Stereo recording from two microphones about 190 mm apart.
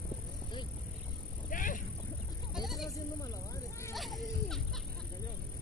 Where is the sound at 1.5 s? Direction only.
45° left (ahead or behind).